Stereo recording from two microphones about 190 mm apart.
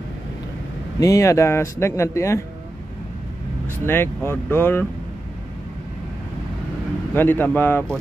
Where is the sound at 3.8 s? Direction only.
10° left (ahead or behind).